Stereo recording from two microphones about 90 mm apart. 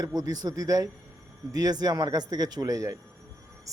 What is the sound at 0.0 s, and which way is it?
A man's voice, 50° right (ahead or behind).